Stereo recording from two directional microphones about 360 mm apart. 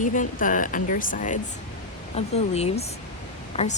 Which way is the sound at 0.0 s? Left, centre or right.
Left.